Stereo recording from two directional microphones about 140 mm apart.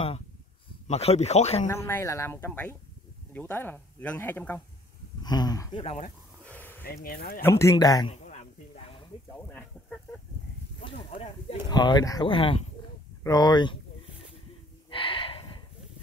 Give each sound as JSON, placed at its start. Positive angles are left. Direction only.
{"t": 0.8, "sound": "speech", "side_deg": 50}
{"t": 1.7, "sound": "speech", "side_deg": 20}
{"t": 5.2, "sound": "speech", "side_deg": 30}
{"t": 5.8, "sound": "speech", "side_deg": 45}
{"t": 6.4, "sound": "a sound", "side_deg": 10}
{"t": 7.1, "sound": "speech", "side_deg": 90}
{"t": 7.4, "sound": "speech", "side_deg": 20}
{"t": 8.1, "sound": "a sound", "side_deg": 50}
{"t": 9.5, "sound": "a sound", "side_deg": 10}
{"t": 10.8, "sound": "speech", "side_deg": 45}
{"t": 12.3, "sound": "speech", "side_deg": 40}
{"t": 14.9, "sound": "gasp", "side_deg": 40}